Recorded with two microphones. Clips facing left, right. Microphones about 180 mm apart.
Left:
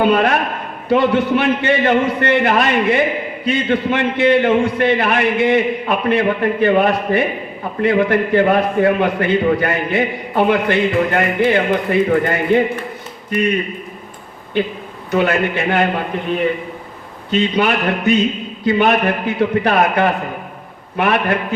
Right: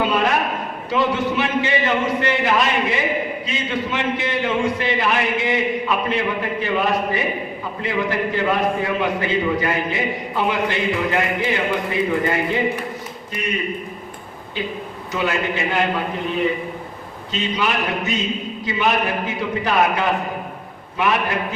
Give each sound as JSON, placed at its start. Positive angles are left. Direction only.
{"t": 0.0, "sound": "a sound", "side_deg": 60}
{"t": 0.9, "sound": "a man's voice", "side_deg": 60}
{"t": 14.6, "sound": "a man's voice", "side_deg": 60}
{"t": 17.3, "sound": "a man's voice", "side_deg": 60}